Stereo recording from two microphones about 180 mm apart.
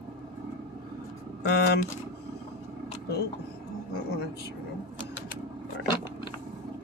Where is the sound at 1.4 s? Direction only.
65° left (ahead or behind).